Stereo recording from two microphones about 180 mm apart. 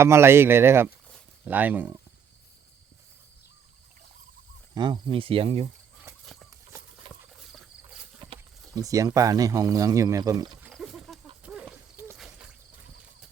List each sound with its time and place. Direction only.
0.0 s speech: 15° right (ahead or behind)
4.7 s speech: 25° right (ahead or behind)
7.1 s clip-clop: 30° right (ahead or behind)
7.5 s insect: centre (ahead or behind)
8.7 s speech: 20° right (ahead or behind)
10.7 s pig: centre (ahead or behind)
11.4 s horse: 5° right (ahead or behind)
12.1 s a sound: 5° right (ahead or behind)